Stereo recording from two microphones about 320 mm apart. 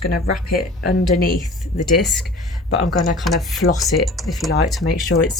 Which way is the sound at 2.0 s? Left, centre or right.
Centre.